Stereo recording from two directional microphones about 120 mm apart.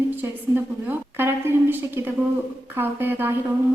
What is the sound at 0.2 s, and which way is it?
A woman's voice, 15° right (ahead or behind).